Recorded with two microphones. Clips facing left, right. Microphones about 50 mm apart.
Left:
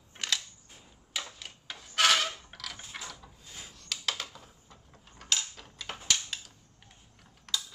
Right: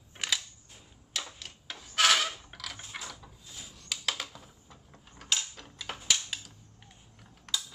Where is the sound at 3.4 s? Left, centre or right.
Left.